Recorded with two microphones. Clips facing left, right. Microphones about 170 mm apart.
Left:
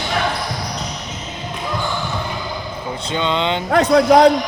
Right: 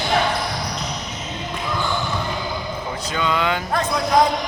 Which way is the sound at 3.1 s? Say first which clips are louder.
Left 2 dB; 25° left (ahead or behind).